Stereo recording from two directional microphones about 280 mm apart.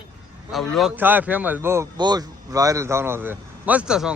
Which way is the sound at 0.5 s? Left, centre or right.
Centre.